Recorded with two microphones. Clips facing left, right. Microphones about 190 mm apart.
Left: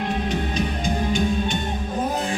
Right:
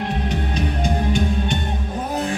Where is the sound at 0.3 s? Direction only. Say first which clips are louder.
Even; 60° right (ahead or behind).